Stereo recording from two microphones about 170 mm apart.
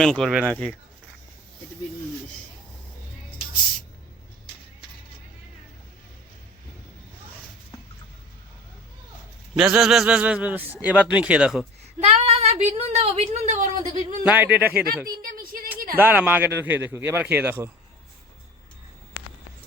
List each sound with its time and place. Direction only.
0.0 s speech: 5° left (ahead or behind)
9.6 s a man's voice: centre (ahead or behind)
11.9 s a woman's voice: 40° right (ahead or behind)
14.3 s a man's voice: 10° right (ahead or behind)
15.2 s a sound: 55° right (ahead or behind)
16.0 s a man's voice: 10° right (ahead or behind)